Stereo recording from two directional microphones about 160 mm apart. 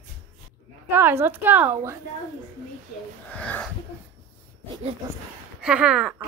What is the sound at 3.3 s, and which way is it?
Speech, 10° left (ahead or behind).